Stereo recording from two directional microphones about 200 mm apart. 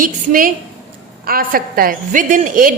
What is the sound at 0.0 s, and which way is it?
A woman's voice, 45° right (ahead or behind).